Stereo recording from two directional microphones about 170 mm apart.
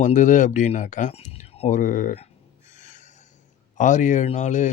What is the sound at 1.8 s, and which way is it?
Speech, 50° left (ahead or behind).